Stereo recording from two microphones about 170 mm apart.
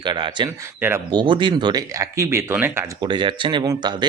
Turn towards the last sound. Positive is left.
turn(degrees=-25)  # may be behind; listen again after turning